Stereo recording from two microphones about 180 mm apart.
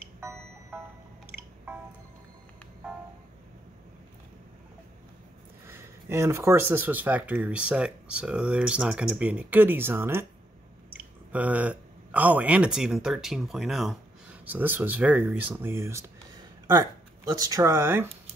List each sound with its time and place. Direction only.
5.7 s speech: 15° right (ahead or behind)